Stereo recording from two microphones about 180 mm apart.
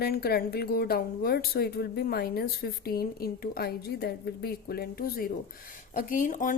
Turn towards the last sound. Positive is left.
turn(degrees=45)  # may be behind; listen again after turning